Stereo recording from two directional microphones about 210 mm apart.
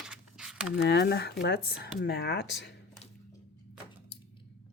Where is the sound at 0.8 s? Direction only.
55° left (ahead or behind).